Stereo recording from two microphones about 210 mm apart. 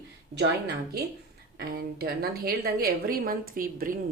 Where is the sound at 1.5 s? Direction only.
45° right (ahead or behind).